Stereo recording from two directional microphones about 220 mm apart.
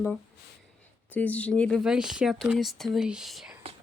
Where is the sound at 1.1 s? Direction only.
5° left (ahead or behind).